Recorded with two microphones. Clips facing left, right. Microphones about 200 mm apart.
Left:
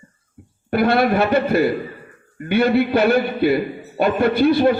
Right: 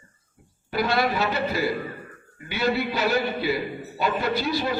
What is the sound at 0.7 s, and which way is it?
A man's voice, 55° left (ahead or behind).